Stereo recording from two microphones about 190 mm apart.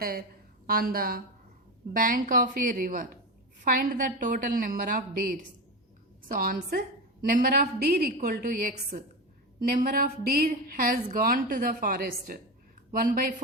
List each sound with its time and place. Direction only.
0.0 s a woman's voice: 50° right (ahead or behind)
6.2 s a woman's voice: 50° right (ahead or behind)
9.7 s a woman's voice: 50° right (ahead or behind)